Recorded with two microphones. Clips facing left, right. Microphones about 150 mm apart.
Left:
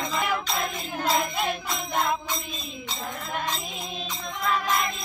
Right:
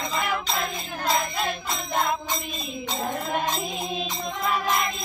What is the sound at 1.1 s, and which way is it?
Music, 15° left (ahead or behind).